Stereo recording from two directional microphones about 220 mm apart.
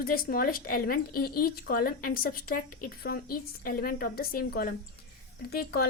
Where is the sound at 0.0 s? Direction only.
40° left (ahead or behind).